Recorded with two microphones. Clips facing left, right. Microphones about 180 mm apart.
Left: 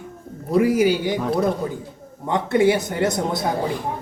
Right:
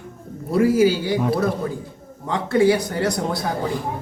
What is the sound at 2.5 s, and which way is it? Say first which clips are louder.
Speech: right 1 dB; 20° left (ahead or behind).